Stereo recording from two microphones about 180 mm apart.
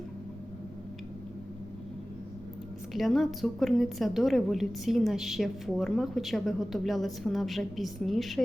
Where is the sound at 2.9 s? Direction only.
Centre (ahead or behind).